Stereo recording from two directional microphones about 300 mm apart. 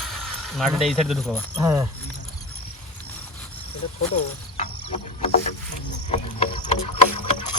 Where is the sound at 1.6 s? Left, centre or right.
Centre.